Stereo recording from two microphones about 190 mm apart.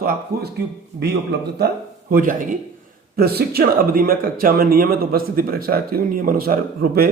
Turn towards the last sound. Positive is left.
turn(degrees=-50)  # may be behind; listen again after turning